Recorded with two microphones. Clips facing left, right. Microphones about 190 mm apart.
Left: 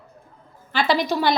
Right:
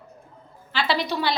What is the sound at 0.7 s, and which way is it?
Speech, 45° left (ahead or behind).